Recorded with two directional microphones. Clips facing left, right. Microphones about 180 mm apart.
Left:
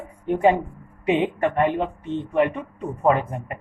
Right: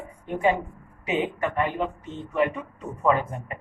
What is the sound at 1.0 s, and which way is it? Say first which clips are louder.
Speech: left 5 dB; 60° left (ahead or behind).